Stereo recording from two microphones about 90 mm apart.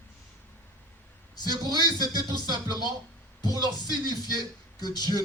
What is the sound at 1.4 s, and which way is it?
Music, 50° left (ahead or behind).